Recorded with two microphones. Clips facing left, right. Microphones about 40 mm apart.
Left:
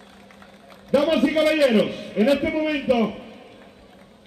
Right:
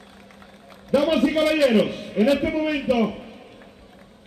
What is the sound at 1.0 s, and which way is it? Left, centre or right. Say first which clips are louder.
Speech: left 1 dB; centre.